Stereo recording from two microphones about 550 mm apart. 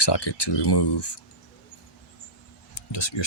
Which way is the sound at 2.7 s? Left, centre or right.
Left.